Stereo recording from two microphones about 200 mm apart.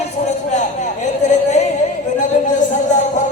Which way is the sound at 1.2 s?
35° left (ahead or behind).